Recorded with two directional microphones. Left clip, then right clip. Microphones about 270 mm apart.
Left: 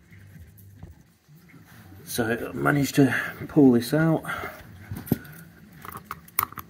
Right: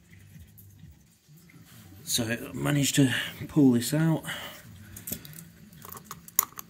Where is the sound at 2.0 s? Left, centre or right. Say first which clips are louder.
Left 4 dB; right.